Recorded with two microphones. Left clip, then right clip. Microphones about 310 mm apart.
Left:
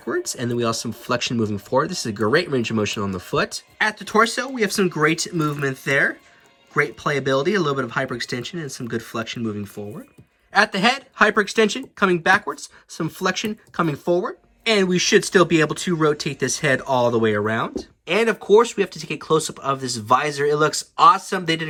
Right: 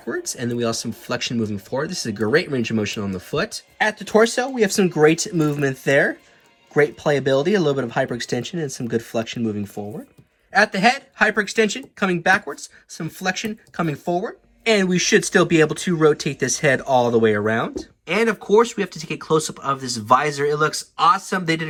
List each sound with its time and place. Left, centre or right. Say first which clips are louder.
0.1 s speech: left 1 dB; centre
10.5 s speech: right 1 dB; centre